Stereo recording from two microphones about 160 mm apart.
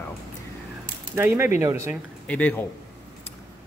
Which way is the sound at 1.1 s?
15° right (ahead or behind).